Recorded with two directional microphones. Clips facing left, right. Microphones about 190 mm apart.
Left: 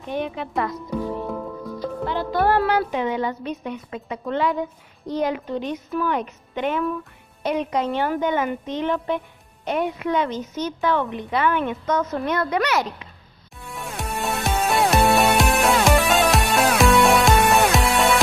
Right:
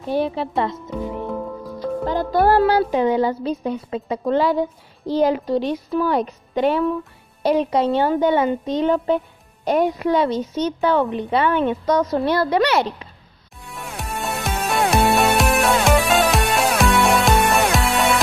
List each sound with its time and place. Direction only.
0.0 s a woman's voice: 35° right (ahead or behind)
2.0 s a woman's voice: 40° right (ahead or behind)
13.7 s music: centre (ahead or behind)